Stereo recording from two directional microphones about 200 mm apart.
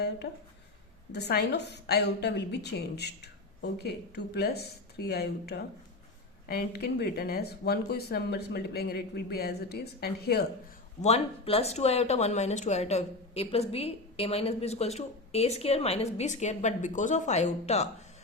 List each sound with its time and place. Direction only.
0.2 s a woman's voice: 55° left (ahead or behind)
11.0 s speech: 30° left (ahead or behind)